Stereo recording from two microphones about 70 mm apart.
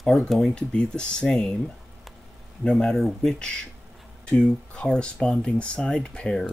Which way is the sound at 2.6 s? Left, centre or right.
Centre.